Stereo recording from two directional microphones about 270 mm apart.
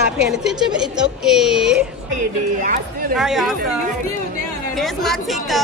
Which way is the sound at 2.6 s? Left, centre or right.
Right.